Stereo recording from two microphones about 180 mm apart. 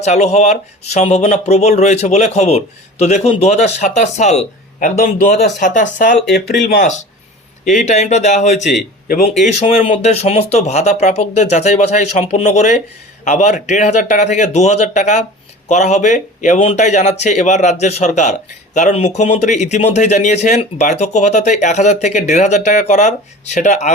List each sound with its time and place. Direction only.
0.0 s speech: 40° left (ahead or behind)
7.6 s speech: 40° left (ahead or behind)
9.0 s speech: 55° left (ahead or behind)
9.6 s speech: 35° left (ahead or behind)